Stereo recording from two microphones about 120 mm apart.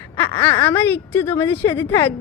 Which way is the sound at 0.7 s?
20° left (ahead or behind).